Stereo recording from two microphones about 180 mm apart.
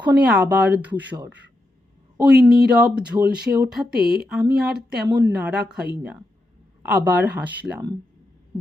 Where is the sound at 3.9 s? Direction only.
60° right (ahead or behind).